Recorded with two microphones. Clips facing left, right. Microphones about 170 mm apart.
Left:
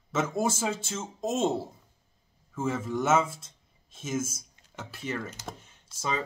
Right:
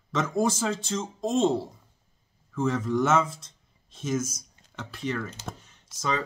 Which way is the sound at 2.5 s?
5° left (ahead or behind).